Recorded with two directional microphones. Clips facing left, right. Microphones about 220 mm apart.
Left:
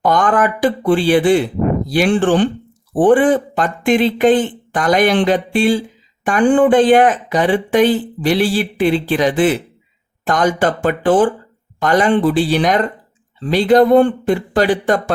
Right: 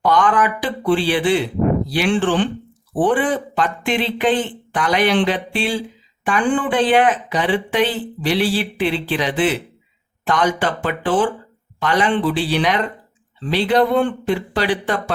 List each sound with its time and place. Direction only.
0.0 s speech: 45° left (ahead or behind)